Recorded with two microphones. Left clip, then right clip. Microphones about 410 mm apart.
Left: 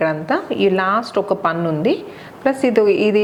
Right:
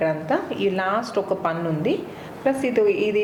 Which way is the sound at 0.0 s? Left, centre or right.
Left.